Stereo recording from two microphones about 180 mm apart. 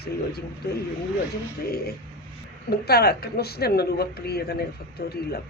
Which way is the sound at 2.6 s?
60° left (ahead or behind).